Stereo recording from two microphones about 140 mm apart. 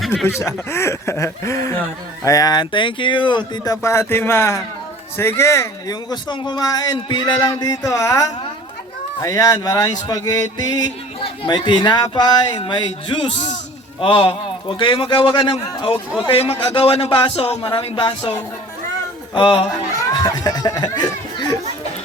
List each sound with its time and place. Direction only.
0.3 s a man's voice: 20° left (ahead or behind); by 18.3 s 35° left (ahead or behind)
19.3 s a man's voice: 35° left (ahead or behind)